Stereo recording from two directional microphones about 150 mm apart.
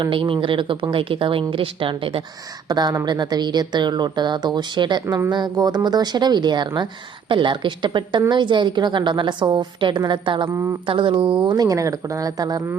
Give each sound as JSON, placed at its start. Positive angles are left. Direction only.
{"t": 0.0, "sound": "a woman's voice", "side_deg": -35}
{"t": 10.5, "sound": "a woman's voice", "side_deg": -20}
{"t": 10.8, "sound": "a woman's voice", "side_deg": -35}